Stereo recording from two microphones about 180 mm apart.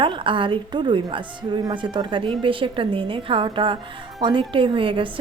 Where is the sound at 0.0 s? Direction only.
30° right (ahead or behind).